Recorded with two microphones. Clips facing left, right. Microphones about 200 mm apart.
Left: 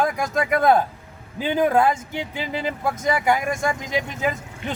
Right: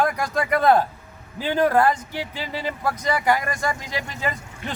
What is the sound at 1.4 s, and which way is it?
A man's voice, 15° left (ahead or behind).